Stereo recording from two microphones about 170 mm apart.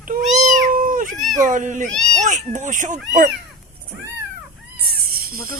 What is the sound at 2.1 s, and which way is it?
Speech, 45° right (ahead or behind).